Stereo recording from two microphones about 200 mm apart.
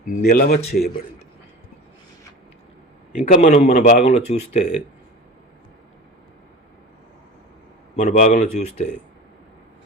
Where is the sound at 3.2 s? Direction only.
40° left (ahead or behind).